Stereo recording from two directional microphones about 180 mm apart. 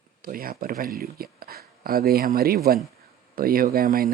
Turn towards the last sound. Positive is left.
turn(degrees=-55)  # may be behind; listen again after turning